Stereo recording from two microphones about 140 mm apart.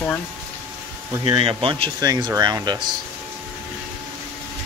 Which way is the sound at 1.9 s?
30° right (ahead or behind).